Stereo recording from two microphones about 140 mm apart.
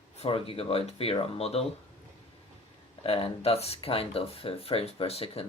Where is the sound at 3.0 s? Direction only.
45° left (ahead or behind).